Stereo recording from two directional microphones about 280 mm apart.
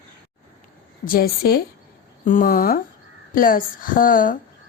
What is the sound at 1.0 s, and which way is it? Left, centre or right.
A woman's voice, left.